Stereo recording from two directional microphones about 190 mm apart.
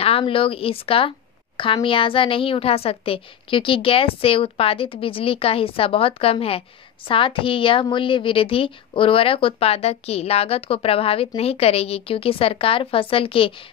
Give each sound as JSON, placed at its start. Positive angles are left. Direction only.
{"t": 0.0, "sound": "a woman's voice", "side_deg": 30}